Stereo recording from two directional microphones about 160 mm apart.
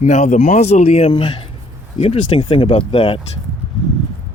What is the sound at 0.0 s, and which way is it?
Speech, 45° left (ahead or behind).